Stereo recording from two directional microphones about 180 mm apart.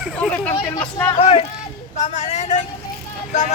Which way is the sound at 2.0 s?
40° left (ahead or behind).